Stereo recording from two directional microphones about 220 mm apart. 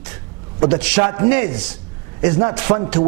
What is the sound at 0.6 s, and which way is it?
Speech, 15° right (ahead or behind).